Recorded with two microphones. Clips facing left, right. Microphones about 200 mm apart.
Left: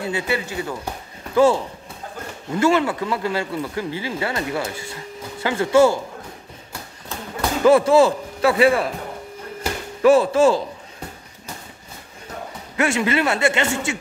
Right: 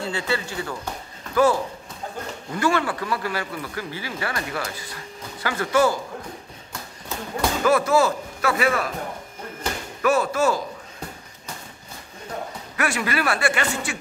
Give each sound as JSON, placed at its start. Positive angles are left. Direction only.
{"t": 0.0, "sound": "speech", "side_deg": 20}
{"t": 2.6, "sound": "speech", "side_deg": 20}
{"t": 7.6, "sound": "speech", "side_deg": 30}
{"t": 10.0, "sound": "speech", "side_deg": 30}
{"t": 12.7, "sound": "speech", "side_deg": 25}